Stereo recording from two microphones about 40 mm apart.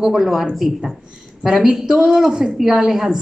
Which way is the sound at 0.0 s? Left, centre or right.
Centre.